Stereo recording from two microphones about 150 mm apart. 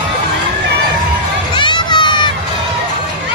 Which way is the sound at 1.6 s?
30° left (ahead or behind).